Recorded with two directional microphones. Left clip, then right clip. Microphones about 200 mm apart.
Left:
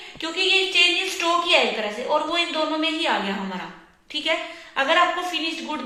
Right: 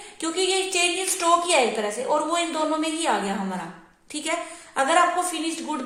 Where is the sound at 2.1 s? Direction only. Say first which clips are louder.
Left 2 dB; 65° right (ahead or behind).